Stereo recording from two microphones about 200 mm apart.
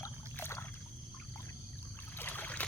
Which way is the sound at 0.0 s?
10° left (ahead or behind).